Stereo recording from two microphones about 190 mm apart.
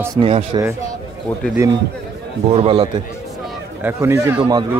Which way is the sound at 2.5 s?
30° right (ahead or behind).